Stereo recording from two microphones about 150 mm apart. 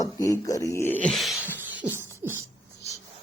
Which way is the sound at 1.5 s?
10° right (ahead or behind).